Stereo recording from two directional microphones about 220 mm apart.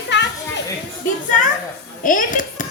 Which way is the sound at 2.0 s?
35° left (ahead or behind).